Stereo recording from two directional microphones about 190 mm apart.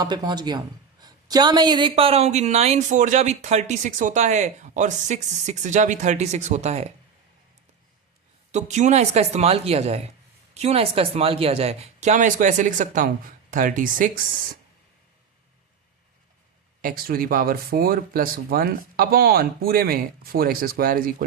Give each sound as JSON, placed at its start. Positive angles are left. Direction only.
{"t": 0.0, "sound": "a woman's voice", "side_deg": -20}
{"t": 8.5, "sound": "a woman's voice", "side_deg": -40}
{"t": 16.8, "sound": "speech", "side_deg": -50}